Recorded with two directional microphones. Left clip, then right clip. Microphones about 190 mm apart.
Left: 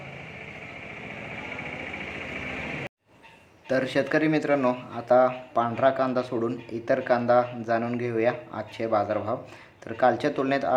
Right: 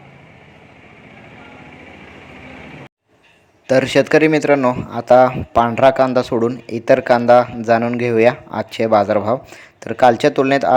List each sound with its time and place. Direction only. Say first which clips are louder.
3.7 s speech: right 11 dB; 35° right (ahead or behind)
4.9 s speech: right 10 dB; 40° right (ahead or behind)